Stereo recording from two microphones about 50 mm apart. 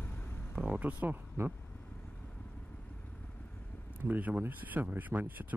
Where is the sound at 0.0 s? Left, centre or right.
Left.